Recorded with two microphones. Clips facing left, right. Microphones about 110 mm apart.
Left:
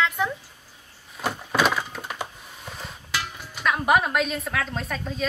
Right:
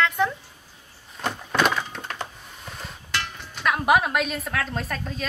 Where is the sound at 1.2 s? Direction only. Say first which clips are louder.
Even; 5° left (ahead or behind).